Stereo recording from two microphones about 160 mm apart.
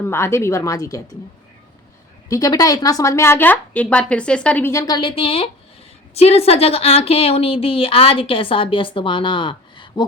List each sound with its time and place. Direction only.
0.0 s a woman's voice: 15° left (ahead or behind)
2.3 s a woman's voice: 25° left (ahead or behind)
4.9 s a woman's voice: 35° left (ahead or behind)